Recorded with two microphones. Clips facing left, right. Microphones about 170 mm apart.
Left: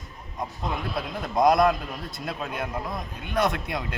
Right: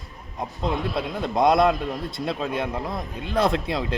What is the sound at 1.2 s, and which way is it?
A man's voice, 25° right (ahead or behind).